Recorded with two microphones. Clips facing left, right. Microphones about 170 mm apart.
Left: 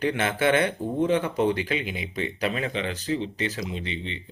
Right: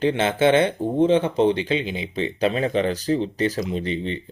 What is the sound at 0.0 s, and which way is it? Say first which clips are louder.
Speech: right 5 dB; 25° right (ahead or behind).